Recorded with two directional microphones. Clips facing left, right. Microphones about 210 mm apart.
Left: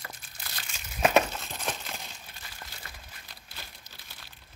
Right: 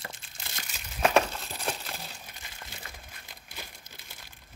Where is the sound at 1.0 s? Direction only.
5° left (ahead or behind).